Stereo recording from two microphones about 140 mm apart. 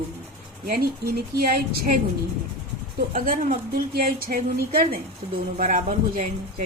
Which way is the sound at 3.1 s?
65° right (ahead or behind).